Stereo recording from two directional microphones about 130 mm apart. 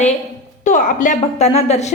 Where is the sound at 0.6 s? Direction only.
75° left (ahead or behind); by 1.9 s 60° left (ahead or behind).